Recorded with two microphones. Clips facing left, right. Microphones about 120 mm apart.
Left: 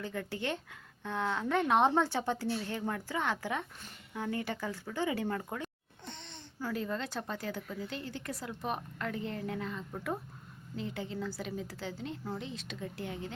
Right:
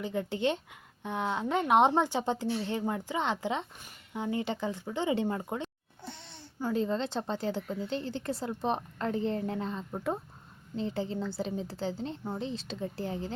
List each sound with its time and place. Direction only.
0.0 s a woman's voice: 20° right (ahead or behind)
6.1 s a sound: 10° right (ahead or behind)
6.6 s a woman's voice: 20° right (ahead or behind)